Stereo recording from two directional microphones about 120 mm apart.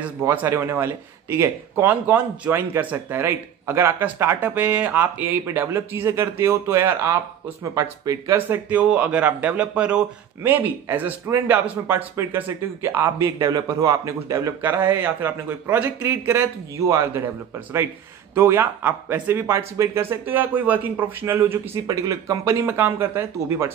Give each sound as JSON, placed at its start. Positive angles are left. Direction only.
{"t": 0.2, "sound": "speech", "side_deg": -20}
{"t": 8.4, "sound": "a man's voice", "side_deg": -15}
{"t": 14.6, "sound": "a man's voice", "side_deg": -15}
{"t": 18.3, "sound": "a man's voice", "side_deg": -20}
{"t": 21.8, "sound": "speech", "side_deg": -30}